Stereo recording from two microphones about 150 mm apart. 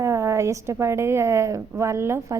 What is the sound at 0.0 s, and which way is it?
A woman's voice, 20° right (ahead or behind).